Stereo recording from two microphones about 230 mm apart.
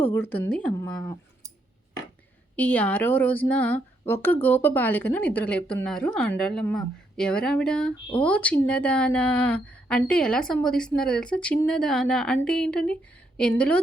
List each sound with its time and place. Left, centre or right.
0.0 s a woman's voice: centre
0.9 s a woman's voice: centre
2.6 s a woman's voice: centre